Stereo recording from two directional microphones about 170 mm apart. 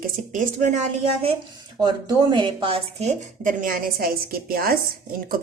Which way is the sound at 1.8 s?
25° right (ahead or behind).